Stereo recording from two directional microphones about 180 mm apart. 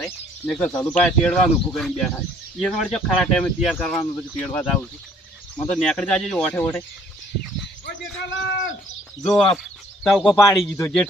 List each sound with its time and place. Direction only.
0.0 s speech: 5° left (ahead or behind)
9.2 s speech: 5° left (ahead or behind)
10.3 s speech: 15° left (ahead or behind)